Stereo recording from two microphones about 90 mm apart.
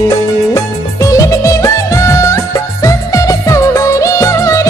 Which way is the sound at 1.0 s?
35° left (ahead or behind).